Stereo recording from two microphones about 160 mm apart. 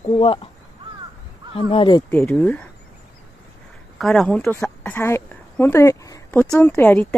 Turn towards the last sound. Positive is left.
turn(degrees=10)  # may be behind; listen again after turning